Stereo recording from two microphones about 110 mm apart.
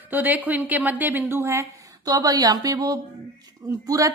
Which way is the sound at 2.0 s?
35° right (ahead or behind).